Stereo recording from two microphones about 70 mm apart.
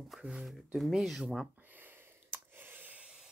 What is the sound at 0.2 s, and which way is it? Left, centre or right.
Speech, centre.